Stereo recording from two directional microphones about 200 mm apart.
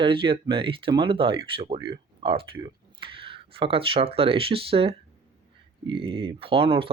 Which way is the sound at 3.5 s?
25° right (ahead or behind).